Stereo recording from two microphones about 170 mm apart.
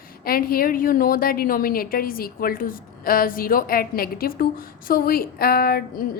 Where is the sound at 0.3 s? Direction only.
60° left (ahead or behind).